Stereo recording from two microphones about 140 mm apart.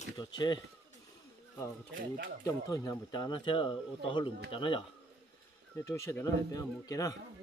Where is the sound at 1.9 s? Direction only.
90° right.